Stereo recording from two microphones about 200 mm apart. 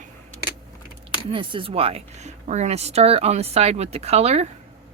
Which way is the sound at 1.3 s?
25° right (ahead or behind).